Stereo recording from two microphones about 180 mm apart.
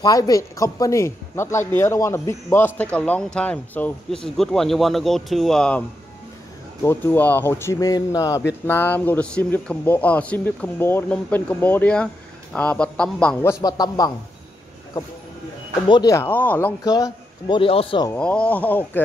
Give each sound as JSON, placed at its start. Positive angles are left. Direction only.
{"t": 0.0, "sound": "a man's voice", "side_deg": 20}
{"t": 15.9, "sound": "a man's voice", "side_deg": 20}
{"t": 18.1, "sound": "a man's voice", "side_deg": 5}